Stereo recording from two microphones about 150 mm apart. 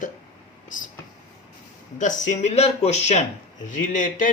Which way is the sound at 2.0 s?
55° left (ahead or behind).